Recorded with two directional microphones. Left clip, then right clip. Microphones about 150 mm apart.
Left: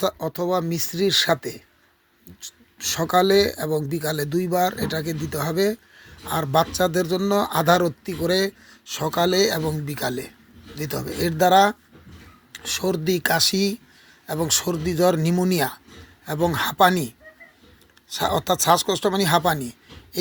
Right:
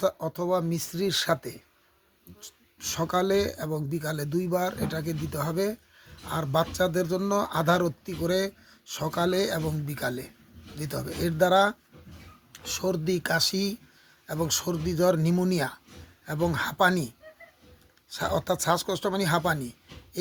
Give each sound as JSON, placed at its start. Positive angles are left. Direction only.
{"t": 0.0, "sound": "speech", "side_deg": 15}